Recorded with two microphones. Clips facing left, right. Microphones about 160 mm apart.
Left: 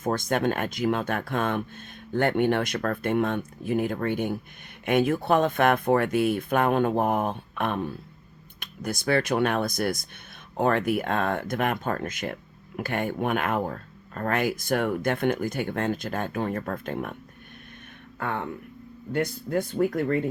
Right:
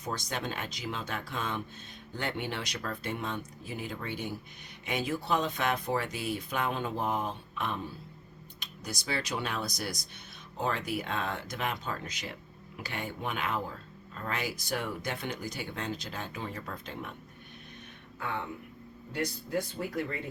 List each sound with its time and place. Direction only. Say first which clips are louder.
0.0 s speech: left 11 dB; 50° left (ahead or behind)
18.2 s speech: left 6 dB; 55° left (ahead or behind)